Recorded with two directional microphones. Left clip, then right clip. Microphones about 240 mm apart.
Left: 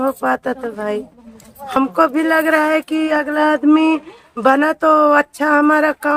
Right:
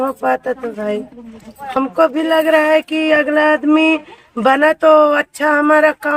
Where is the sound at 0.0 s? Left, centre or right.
Left.